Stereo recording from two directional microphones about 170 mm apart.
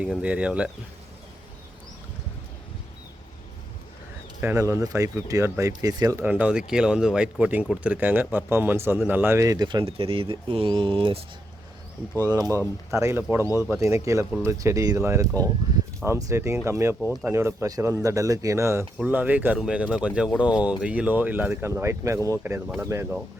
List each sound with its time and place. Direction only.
0.0 s speech: 5° right (ahead or behind)
4.4 s speech: 15° right (ahead or behind)
6.2 s speech: 10° right (ahead or behind); by 11.2 s 30° right (ahead or behind)
12.3 s speech: 20° right (ahead or behind)
15.7 s a sound: 20° right (ahead or behind)
16.0 s speech: 15° right (ahead or behind)